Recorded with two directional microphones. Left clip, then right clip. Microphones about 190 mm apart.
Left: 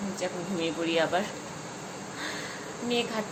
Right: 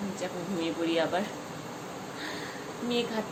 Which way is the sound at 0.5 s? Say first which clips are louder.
Left 1 dB; 15° left (ahead or behind).